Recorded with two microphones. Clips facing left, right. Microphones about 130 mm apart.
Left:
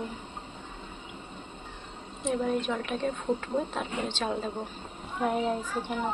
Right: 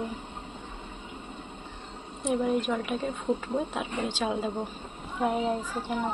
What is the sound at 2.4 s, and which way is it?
A woman's voice, 5° right (ahead or behind).